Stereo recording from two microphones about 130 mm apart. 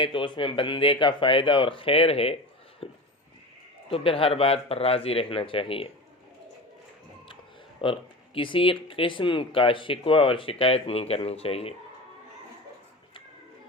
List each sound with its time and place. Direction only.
0.0 s speech: 40° left (ahead or behind)
7.8 s speech: 40° left (ahead or behind)